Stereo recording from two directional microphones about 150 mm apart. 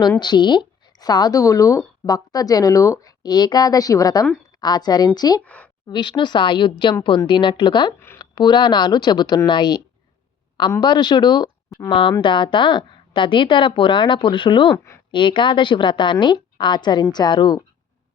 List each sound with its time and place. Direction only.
0.2 s speech: 30° left (ahead or behind)
5.4 s a sound: 10° left (ahead or behind)
5.9 s speech: 30° left (ahead or behind)
7.9 s speech: 15° left (ahead or behind)
8.2 s speech: 30° left (ahead or behind)